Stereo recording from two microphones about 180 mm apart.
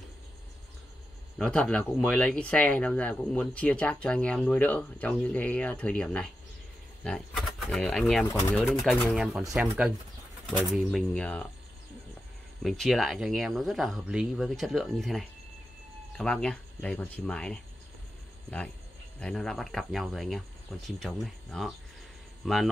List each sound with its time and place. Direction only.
1.4 s speech: 5° left (ahead or behind)
12.6 s speech: centre (ahead or behind)
19.1 s speech: 5° left (ahead or behind)